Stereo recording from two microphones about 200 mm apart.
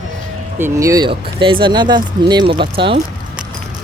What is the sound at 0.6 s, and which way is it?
Speech, 15° right (ahead or behind).